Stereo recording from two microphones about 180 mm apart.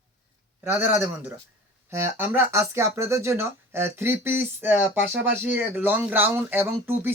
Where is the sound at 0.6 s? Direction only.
10° right (ahead or behind).